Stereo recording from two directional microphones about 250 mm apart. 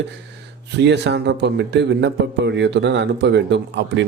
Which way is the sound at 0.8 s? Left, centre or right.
Right.